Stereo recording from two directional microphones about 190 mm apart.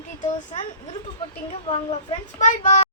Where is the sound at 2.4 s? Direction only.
40° left (ahead or behind).